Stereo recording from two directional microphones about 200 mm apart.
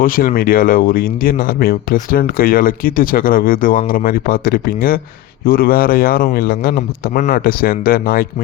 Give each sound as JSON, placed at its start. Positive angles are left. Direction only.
{"t": 0.0, "sound": "speech", "side_deg": 45}